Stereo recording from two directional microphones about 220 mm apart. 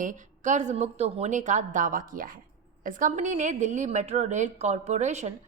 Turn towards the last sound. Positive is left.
turn(degrees=-30)  # may be behind; listen again after turning